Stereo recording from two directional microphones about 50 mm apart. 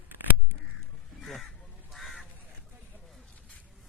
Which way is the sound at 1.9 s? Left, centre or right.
Centre.